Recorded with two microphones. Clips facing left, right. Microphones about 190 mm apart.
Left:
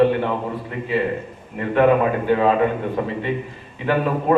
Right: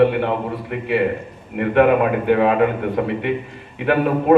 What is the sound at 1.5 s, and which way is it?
A man's voice, 65° right (ahead or behind).